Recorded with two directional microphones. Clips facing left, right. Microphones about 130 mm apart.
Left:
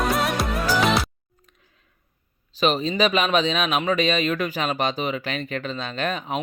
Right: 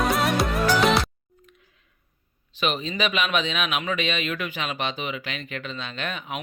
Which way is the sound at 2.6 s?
35° left (ahead or behind).